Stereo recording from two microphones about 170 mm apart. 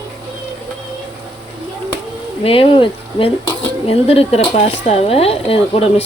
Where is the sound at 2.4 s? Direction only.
35° left (ahead or behind).